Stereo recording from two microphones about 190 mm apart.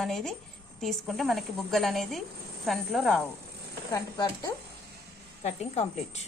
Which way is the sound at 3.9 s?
20° left (ahead or behind).